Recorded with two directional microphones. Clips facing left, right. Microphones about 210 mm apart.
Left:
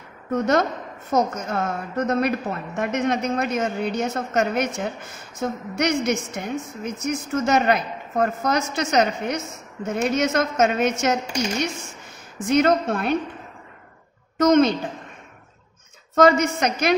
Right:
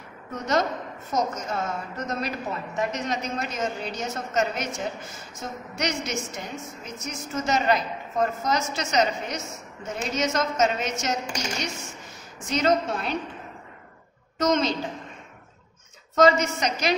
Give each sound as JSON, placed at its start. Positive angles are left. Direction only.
{"t": 0.3, "sound": "a woman's voice", "side_deg": 55}
{"t": 12.4, "sound": "a woman's voice", "side_deg": 55}
{"t": 14.4, "sound": "a woman's voice", "side_deg": 55}
{"t": 16.2, "sound": "a woman's voice", "side_deg": 55}